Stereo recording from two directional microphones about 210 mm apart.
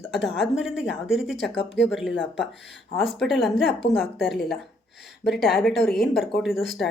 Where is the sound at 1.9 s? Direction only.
Centre (ahead or behind).